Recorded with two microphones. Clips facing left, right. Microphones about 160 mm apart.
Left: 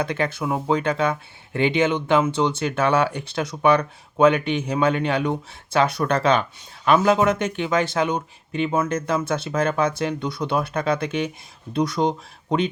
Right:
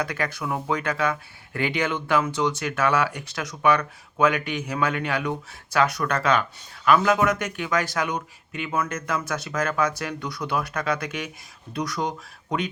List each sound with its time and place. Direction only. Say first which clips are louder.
0.0 s speech: left 4 dB; 25° left (ahead or behind)